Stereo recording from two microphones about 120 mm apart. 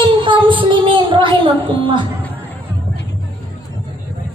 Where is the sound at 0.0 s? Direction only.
45° right (ahead or behind).